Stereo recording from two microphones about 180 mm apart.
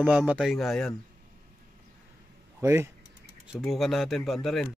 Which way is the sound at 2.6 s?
15° right (ahead or behind).